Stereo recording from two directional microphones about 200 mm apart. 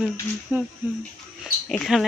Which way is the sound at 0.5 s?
5° right (ahead or behind).